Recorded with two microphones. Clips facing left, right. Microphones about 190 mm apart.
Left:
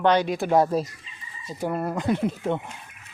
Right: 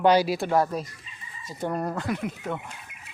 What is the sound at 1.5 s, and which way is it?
Speech, 5° left (ahead or behind).